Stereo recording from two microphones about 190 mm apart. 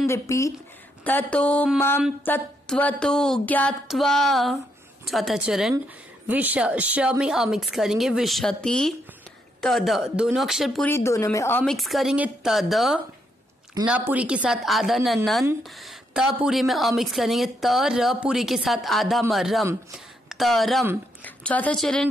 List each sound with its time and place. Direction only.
0.0 s a woman's voice: 15° left (ahead or behind); by 10.9 s centre (ahead or behind)
10.9 s a woman's voice: 15° left (ahead or behind)